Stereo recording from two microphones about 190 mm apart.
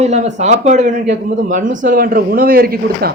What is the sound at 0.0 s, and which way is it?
Speech, 35° right (ahead or behind).